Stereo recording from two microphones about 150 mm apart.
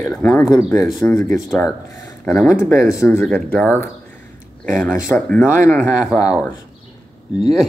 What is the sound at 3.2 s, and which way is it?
Speech, 5° left (ahead or behind).